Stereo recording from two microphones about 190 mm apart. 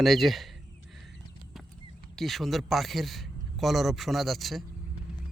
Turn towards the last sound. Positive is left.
turn(degrees=0)  # may be behind; listen again after turning